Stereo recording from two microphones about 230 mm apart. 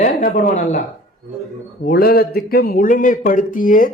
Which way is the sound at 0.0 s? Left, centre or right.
Left.